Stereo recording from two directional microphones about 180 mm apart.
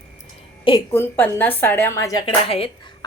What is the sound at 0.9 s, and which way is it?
A woman's voice, 10° left (ahead or behind).